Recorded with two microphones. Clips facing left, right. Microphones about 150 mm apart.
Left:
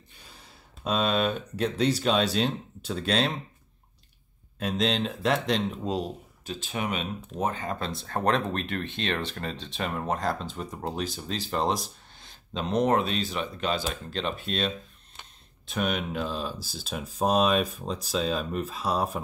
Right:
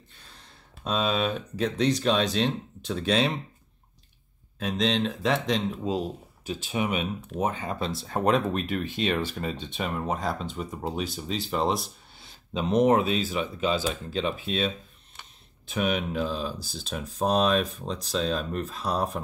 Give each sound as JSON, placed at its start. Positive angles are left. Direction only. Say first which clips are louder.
{"t": 0.2, "sound": "speech", "louder": "left 2 dB", "side_deg": 5}
{"t": 4.6, "sound": "speech", "louder": "right 1 dB", "side_deg": 0}
{"t": 15.7, "sound": "speech", "louder": "right 2 dB", "side_deg": -5}